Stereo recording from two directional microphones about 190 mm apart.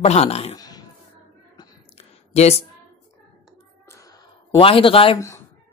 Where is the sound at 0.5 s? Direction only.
20° left (ahead or behind).